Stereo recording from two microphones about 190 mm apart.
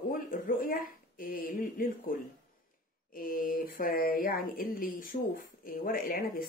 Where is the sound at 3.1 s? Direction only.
45° left (ahead or behind).